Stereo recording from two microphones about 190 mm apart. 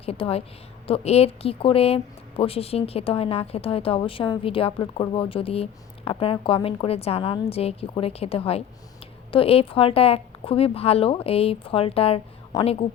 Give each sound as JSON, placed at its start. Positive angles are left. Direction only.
{"t": 0.0, "sound": "a woman's voice", "side_deg": 30}